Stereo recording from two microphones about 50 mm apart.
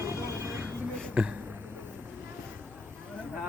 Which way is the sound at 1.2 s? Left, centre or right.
Right.